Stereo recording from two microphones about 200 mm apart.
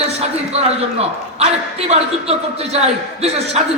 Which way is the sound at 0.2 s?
30° right (ahead or behind).